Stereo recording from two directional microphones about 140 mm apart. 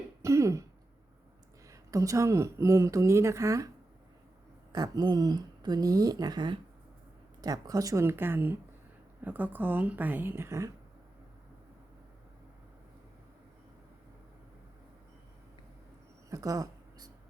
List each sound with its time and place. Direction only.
0.2 s throat clearing: 20° right (ahead or behind)
1.6 s speech: 25° right (ahead or behind)
4.7 s a woman's voice: 30° right (ahead or behind)
16.3 s a sound: 25° right (ahead or behind)